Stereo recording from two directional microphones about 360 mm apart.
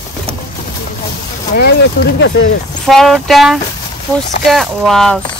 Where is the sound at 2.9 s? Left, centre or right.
Centre.